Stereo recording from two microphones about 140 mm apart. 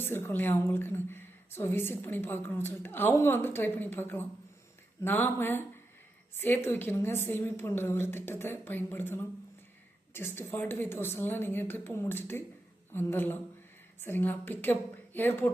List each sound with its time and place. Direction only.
0.0 s a woman's voice: 15° left (ahead or behind)